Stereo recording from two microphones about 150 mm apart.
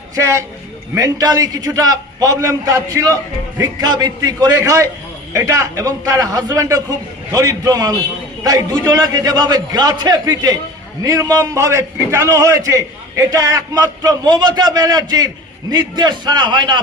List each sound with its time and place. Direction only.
0.2 s a man's voice: 20° right (ahead or behind)